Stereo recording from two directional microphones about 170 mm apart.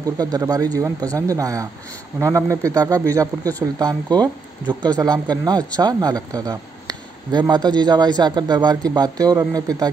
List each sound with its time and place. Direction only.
0.0 s speech: 20° right (ahead or behind)